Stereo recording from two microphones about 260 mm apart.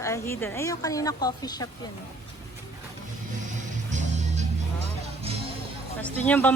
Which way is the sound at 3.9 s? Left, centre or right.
Right.